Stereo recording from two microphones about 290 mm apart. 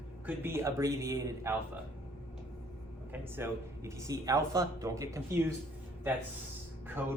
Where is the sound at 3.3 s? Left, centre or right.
Centre.